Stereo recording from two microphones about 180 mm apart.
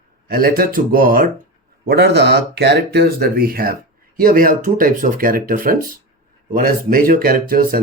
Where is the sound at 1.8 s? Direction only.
65° right (ahead or behind).